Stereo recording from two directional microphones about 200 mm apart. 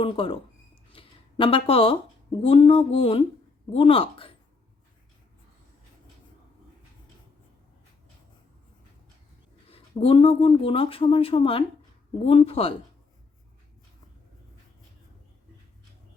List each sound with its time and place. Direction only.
0.0 s speech: 25° left (ahead or behind)
9.6 s speech: 30° left (ahead or behind)